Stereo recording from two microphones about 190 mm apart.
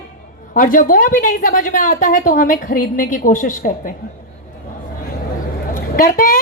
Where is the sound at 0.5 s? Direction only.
45° left (ahead or behind).